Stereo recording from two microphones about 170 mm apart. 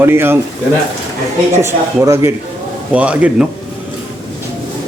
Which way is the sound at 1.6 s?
15° right (ahead or behind).